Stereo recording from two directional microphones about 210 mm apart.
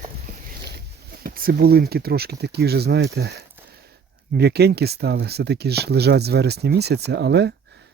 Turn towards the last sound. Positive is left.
turn(degrees=-55)  # may be behind; listen again after turning